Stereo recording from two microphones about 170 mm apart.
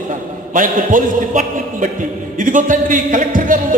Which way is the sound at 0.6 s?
50° right (ahead or behind).